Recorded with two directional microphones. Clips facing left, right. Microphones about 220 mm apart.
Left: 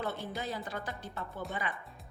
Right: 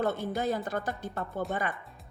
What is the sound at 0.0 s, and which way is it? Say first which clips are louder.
A woman's voice: right 8 dB; 50° right (ahead or behind).